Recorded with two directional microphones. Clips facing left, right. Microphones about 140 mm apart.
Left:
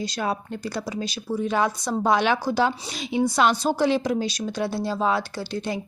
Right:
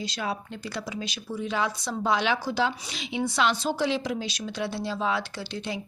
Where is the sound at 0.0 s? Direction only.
45° left (ahead or behind).